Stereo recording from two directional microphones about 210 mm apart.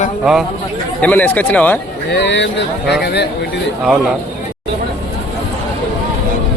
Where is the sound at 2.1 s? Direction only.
55° left (ahead or behind).